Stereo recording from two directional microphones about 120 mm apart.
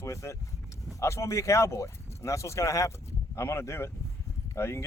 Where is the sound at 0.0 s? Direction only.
25° left (ahead or behind).